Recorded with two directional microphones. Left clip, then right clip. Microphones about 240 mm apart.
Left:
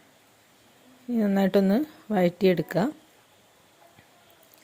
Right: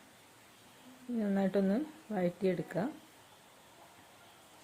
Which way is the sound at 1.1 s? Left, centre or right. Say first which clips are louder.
Left 10 dB; left.